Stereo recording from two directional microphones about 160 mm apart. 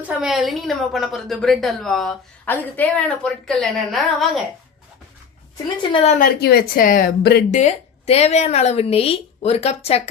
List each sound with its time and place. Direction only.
0.2 s a woman's voice: centre (ahead or behind)
5.9 s a woman's voice: 40° left (ahead or behind)
6.1 s speech: 70° left (ahead or behind); by 7.4 s 85° left
7.5 s a woman's voice: 45° left (ahead or behind)